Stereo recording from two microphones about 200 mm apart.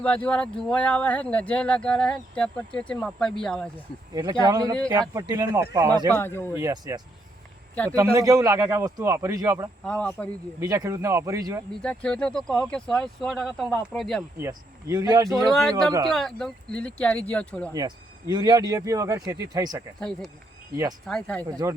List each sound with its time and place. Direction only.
0.0 s speech: 5° left (ahead or behind)
4.1 s speech: 15° right (ahead or behind)
6.1 s speech: 10° left (ahead or behind)
6.6 s speech: 15° right (ahead or behind)
9.8 s speech: 5° left (ahead or behind)
10.6 s speech: 15° right (ahead or behind)
11.7 s speech: 5° left (ahead or behind)
14.3 s speech: 15° right (ahead or behind)
15.3 s speech: centre (ahead or behind)
17.7 s speech: 20° right (ahead or behind)
20.0 s speech: 5° left (ahead or behind)
21.4 s speech: 20° right (ahead or behind)